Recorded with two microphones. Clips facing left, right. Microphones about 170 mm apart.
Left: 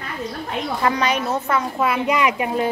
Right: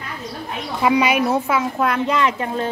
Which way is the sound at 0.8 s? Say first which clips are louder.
Right 5 dB; 10° right (ahead or behind).